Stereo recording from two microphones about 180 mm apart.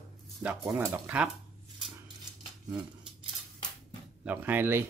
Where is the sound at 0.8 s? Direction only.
10° right (ahead or behind).